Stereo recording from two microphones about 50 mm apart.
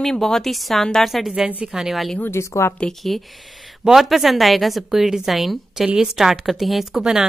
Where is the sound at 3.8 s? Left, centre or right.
Centre.